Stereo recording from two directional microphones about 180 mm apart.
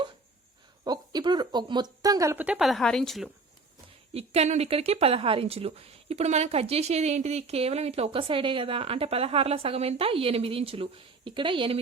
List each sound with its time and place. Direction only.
0.9 s a woman's voice: 25° right (ahead or behind); by 3.2 s centre (ahead or behind)
4.1 s speech: 35° right (ahead or behind)